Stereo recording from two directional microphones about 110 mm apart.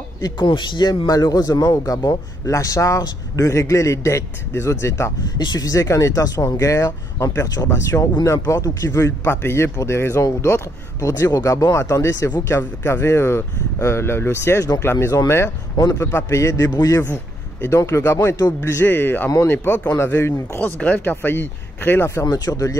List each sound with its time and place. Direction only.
0.2 s speech: 45° left (ahead or behind); by 5.1 s 25° left (ahead or behind)
5.4 s speech: 35° left (ahead or behind)
15.7 s a man's voice: 35° left (ahead or behind)
16.0 s speech: 25° left (ahead or behind)